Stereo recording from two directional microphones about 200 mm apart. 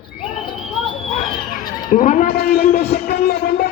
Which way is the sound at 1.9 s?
40° left (ahead or behind).